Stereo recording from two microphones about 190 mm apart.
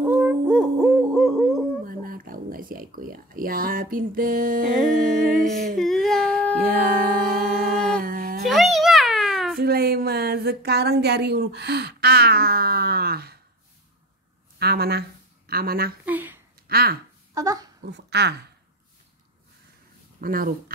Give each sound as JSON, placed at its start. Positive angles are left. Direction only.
{"t": 0.0, "sound": "hoot", "side_deg": -10}
{"t": 1.9, "sound": "speech", "side_deg": -50}
{"t": 4.9, "sound": "humming", "side_deg": -45}
{"t": 5.8, "sound": "humming", "side_deg": 0}
{"t": 6.6, "sound": "music", "side_deg": -50}
{"t": 8.0, "sound": "humming", "side_deg": -50}
{"t": 8.5, "sound": "a sound", "side_deg": 0}
{"t": 9.6, "sound": "a woman's voice", "side_deg": -55}
{"t": 14.6, "sound": "speech", "side_deg": -55}
{"t": 16.1, "sound": "speech", "side_deg": -10}
{"t": 16.6, "sound": "speech", "side_deg": -55}
{"t": 17.3, "sound": "speech", "side_deg": -20}
{"t": 17.8, "sound": "speech", "side_deg": -65}
{"t": 20.2, "sound": "speech", "side_deg": -50}